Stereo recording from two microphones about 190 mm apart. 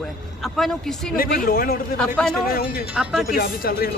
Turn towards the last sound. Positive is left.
turn(degrees=50)  # may be behind; listen again after turning